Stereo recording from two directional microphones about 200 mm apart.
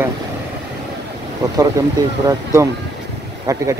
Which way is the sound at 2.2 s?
15° right (ahead or behind).